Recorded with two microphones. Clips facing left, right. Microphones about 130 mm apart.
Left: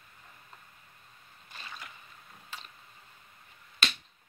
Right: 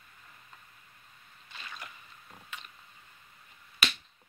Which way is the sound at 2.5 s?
35° left (ahead or behind).